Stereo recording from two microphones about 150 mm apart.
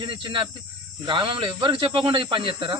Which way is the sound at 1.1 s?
35° right (ahead or behind).